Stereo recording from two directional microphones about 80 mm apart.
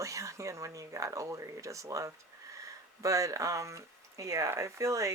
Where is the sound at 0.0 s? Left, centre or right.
Right.